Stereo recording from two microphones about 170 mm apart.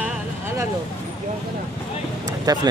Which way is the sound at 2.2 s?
20° right (ahead or behind).